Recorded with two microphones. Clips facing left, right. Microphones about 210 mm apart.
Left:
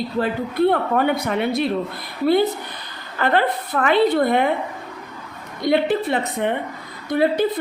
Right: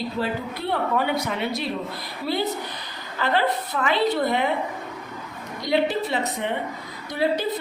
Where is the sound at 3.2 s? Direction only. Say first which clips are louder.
Left 3 dB; 55° left (ahead or behind).